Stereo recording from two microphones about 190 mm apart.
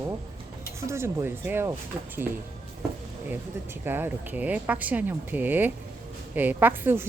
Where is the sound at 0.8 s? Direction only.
15° right (ahead or behind).